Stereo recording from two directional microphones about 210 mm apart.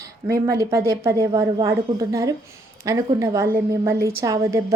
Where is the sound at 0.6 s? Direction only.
15° right (ahead or behind).